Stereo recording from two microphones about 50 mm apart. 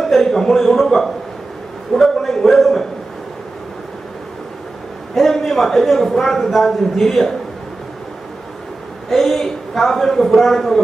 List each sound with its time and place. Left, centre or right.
0.0 s a man's voice: centre
5.1 s a man's voice: centre
9.1 s a man's voice: centre